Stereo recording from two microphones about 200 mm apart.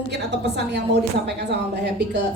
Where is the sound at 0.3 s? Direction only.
60° right (ahead or behind).